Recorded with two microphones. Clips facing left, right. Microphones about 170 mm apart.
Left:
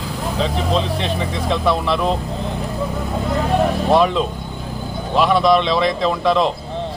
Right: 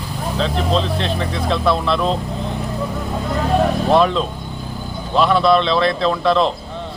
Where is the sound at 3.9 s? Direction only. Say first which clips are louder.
Even; 10° left (ahead or behind).